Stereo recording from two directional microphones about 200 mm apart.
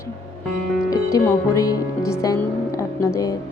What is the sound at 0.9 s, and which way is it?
Speech, 15° left (ahead or behind).